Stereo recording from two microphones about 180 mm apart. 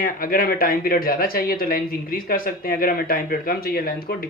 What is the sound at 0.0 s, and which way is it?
Speech, 50° left (ahead or behind).